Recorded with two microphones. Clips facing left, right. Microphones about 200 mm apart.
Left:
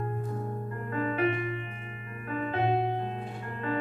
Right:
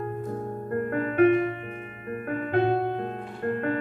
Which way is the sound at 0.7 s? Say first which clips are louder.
Right 6 dB; 60° right (ahead or behind).